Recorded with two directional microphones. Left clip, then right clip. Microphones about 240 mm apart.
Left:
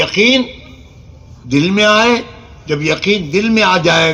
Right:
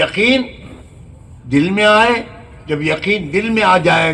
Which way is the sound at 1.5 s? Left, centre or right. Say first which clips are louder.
Even; left.